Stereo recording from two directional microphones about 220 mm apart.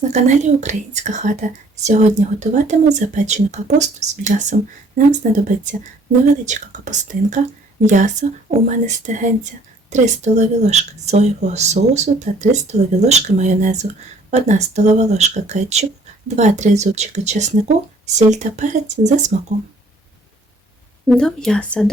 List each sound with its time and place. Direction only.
0.1 s speech: 30° right (ahead or behind)
21.1 s speech: centre (ahead or behind)